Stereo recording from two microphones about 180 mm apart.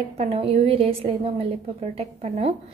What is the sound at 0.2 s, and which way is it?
A woman's voice, 35° right (ahead or behind).